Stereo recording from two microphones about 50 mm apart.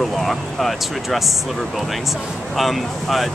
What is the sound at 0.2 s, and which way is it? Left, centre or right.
Speech, centre.